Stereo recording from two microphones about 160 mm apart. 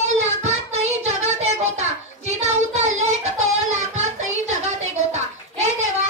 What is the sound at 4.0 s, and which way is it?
Music, 45° right (ahead or behind).